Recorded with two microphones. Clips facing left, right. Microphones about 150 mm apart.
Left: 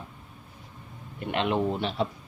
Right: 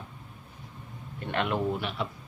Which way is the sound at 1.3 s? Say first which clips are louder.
Left 2 dB; 20° left (ahead or behind).